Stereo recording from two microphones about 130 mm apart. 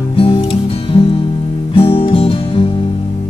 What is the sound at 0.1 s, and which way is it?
Music, 45° left (ahead or behind).